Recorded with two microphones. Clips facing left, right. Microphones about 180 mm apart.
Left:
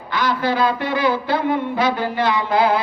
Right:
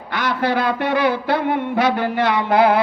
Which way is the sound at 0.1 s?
65° right (ahead or behind).